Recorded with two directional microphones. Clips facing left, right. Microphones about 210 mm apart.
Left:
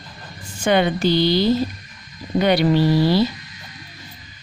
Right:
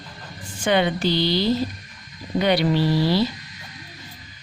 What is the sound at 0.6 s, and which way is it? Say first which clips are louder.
Speech: left 3 dB; 45° left (ahead or behind).